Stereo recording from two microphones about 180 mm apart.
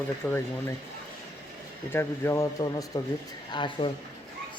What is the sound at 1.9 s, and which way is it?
A man's voice, 15° left (ahead or behind).